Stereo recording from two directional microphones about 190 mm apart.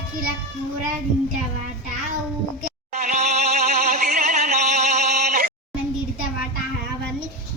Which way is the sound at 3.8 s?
40° right (ahead or behind).